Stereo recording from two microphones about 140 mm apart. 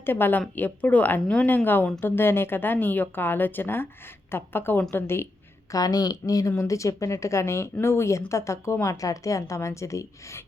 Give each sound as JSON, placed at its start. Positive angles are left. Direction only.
{"t": 0.0, "sound": "a woman's voice", "side_deg": 15}